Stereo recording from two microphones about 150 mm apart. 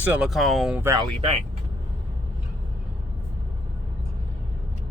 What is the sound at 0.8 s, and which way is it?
Speech, 20° right (ahead or behind).